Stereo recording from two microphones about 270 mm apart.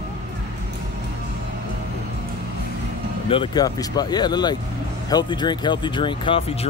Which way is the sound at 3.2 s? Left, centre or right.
Centre.